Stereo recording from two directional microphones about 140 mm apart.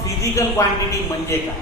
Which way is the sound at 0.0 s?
20° left (ahead or behind).